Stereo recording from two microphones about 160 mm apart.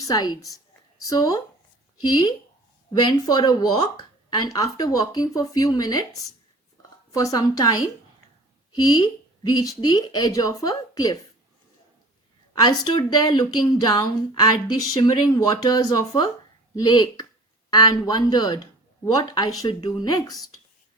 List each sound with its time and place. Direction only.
0.0 s speech: 25° left (ahead or behind)
7.1 s speech: 20° left (ahead or behind)
12.5 s speech: 25° left (ahead or behind)